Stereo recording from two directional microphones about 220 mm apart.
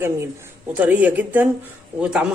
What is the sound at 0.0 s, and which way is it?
Speech, 10° right (ahead or behind).